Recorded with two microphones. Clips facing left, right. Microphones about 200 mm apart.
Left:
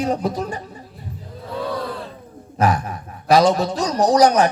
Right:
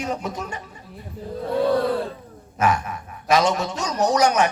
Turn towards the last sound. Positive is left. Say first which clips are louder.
# left 4 dB
turn(degrees=35)  # may be behind; listen again after turning